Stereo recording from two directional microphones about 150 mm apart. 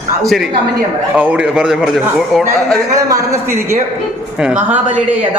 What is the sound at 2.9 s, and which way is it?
A man's voice, 20° right (ahead or behind).